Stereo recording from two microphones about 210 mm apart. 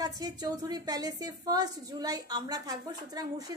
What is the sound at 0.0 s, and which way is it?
A woman's voice, 20° right (ahead or behind).